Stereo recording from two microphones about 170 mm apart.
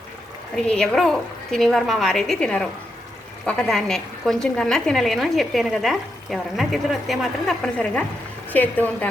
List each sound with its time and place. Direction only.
0.5 s a woman's voice: 5° left (ahead or behind)